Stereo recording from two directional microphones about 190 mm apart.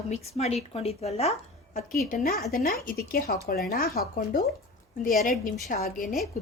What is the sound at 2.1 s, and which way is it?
Speech, 50° left (ahead or behind).